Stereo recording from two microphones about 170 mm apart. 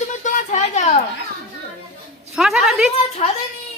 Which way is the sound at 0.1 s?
45° left (ahead or behind).